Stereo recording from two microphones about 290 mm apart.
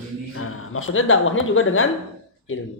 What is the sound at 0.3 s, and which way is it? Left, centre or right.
A man's voice, left.